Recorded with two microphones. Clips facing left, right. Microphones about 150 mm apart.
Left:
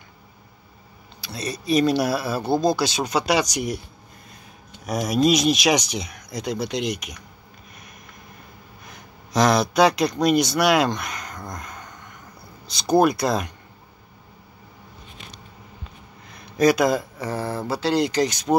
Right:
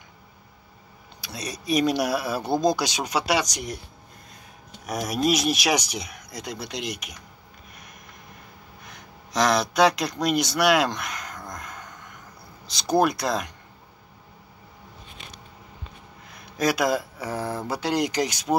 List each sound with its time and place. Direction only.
1.2 s speech: 15° right (ahead or behind); by 3.7 s 5° left (ahead or behind)
4.8 s speech: centre (ahead or behind)
8.8 s a sound: centre (ahead or behind)
12.6 s speech: centre (ahead or behind)
16.3 s speech: centre (ahead or behind)